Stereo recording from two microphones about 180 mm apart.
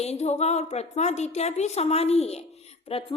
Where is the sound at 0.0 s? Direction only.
35° left (ahead or behind).